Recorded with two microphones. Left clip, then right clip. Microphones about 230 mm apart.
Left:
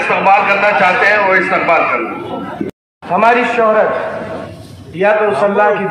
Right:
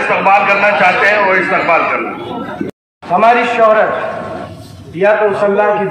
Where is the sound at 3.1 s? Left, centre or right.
Left.